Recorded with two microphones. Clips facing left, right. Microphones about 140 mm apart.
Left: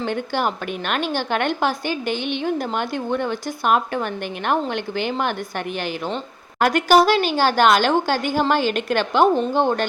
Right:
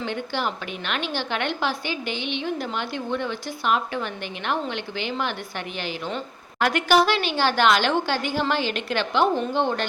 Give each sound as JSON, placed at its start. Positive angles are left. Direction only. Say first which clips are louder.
{"t": 0.0, "sound": "a woman's voice", "louder": "left 5 dB", "side_deg": 50}